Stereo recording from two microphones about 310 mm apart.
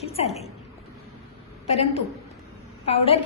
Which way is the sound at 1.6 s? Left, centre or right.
Centre.